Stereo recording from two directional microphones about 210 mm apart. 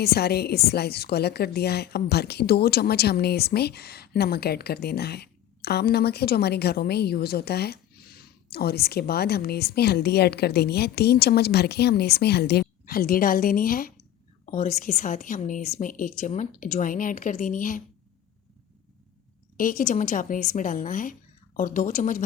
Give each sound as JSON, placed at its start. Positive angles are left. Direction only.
{"t": 0.0, "sound": "a woman's voice", "side_deg": 50}
{"t": 19.5, "sound": "a woman's voice", "side_deg": 40}